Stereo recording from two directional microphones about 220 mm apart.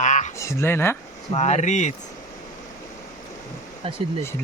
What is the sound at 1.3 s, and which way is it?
Speech, 30° left (ahead or behind).